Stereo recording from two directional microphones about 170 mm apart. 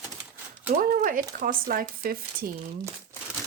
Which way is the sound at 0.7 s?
55° right (ahead or behind).